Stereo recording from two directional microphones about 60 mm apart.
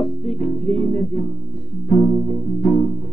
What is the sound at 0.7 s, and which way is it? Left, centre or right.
Music, left.